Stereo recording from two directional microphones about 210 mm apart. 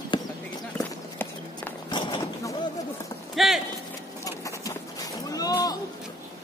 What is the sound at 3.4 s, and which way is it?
Clip-clop, centre (ahead or behind).